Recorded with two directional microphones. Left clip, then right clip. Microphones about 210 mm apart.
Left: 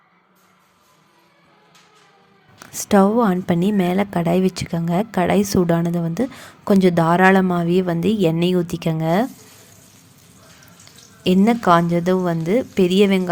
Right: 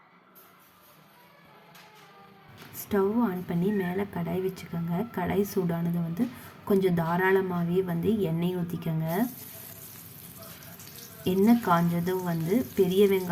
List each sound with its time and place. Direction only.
2.7 s a woman's voice: 45° left (ahead or behind)
11.2 s a woman's voice: 45° left (ahead or behind)